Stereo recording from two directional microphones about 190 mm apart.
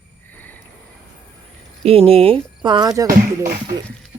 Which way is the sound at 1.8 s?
30° right (ahead or behind).